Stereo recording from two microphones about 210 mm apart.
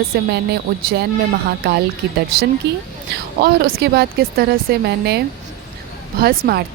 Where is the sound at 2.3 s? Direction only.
50° right (ahead or behind).